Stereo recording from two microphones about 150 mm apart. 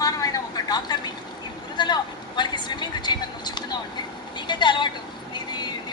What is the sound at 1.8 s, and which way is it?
Speech, 30° left (ahead or behind).